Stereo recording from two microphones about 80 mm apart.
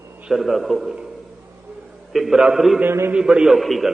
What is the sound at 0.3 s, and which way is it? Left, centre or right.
Speech, centre.